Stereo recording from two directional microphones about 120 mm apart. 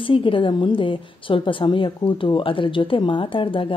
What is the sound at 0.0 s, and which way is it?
A woman's voice, 45° left (ahead or behind).